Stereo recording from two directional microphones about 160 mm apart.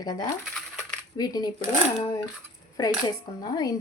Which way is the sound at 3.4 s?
25° left (ahead or behind).